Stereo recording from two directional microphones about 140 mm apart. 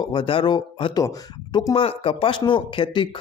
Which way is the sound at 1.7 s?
40° left (ahead or behind).